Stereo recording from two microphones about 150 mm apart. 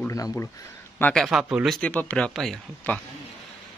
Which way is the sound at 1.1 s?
Centre (ahead or behind).